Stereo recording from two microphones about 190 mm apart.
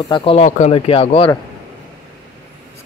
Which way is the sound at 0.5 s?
40° left (ahead or behind).